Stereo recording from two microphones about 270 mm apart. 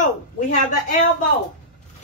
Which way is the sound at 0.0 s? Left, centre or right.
Left.